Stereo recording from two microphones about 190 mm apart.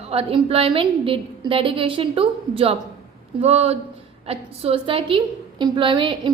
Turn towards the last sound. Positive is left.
turn(degrees=-25)  # may be behind; listen again after turning